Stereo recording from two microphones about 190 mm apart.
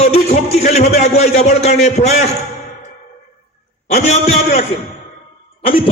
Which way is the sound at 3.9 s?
35° left (ahead or behind).